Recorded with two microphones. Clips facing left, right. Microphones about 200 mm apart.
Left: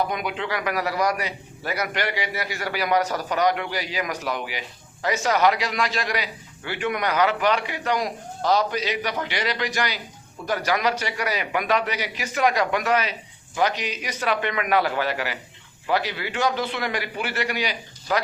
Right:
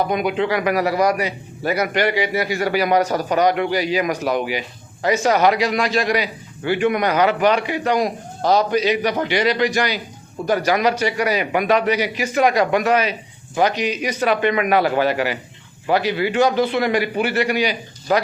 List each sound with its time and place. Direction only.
0.1 s a man's voice: 15° right (ahead or behind)